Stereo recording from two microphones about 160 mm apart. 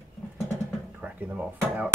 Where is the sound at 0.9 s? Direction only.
10° right (ahead or behind).